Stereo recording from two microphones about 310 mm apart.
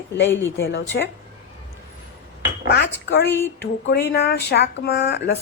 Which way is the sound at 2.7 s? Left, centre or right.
Left.